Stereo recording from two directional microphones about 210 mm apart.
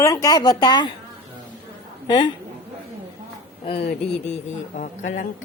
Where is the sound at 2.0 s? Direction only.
25° left (ahead or behind).